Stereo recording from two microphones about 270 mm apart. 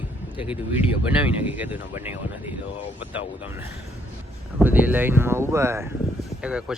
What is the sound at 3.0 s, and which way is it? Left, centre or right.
Speech, centre.